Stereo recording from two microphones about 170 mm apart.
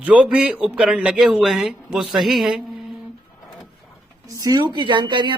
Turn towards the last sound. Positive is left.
turn(degrees=-30)  # may be behind; listen again after turning